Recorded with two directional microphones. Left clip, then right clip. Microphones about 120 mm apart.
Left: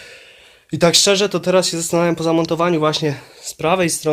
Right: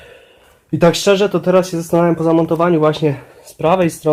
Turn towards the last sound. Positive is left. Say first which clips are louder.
# right 3 dB
turn(degrees=15)  # may be behind; listen again after turning